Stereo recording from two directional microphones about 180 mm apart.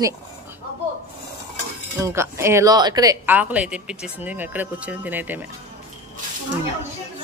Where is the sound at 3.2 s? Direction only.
10° right (ahead or behind).